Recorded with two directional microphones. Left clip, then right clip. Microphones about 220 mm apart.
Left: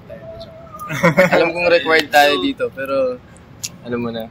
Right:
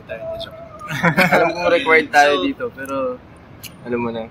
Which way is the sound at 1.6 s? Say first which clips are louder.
Even; 35° left (ahead or behind).